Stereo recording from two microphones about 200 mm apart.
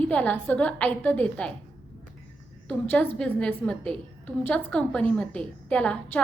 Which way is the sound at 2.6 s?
5° left (ahead or behind).